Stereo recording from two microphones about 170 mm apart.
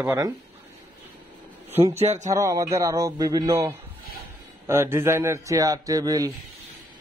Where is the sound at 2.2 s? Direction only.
20° right (ahead or behind).